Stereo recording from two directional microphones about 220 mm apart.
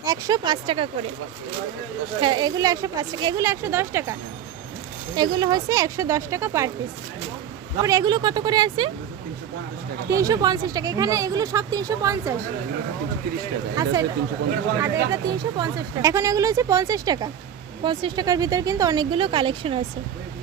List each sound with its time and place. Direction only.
0.0 s speech: 15° right (ahead or behind)
2.2 s speech: 20° right (ahead or behind)
5.1 s speech: 20° right (ahead or behind)
7.8 s speech: 15° right (ahead or behind)
10.1 s speech: 15° right (ahead or behind)
14.8 s speech: 15° right (ahead or behind)